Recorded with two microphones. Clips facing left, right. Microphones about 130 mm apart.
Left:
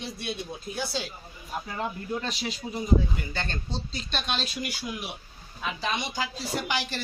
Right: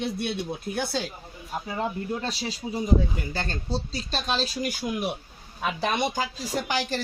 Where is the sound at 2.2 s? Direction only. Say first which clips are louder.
Right 2 dB; 35° right (ahead or behind).